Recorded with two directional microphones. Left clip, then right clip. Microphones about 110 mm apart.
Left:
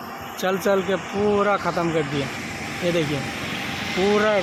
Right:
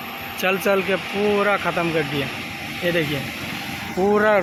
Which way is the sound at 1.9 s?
10° left (ahead or behind).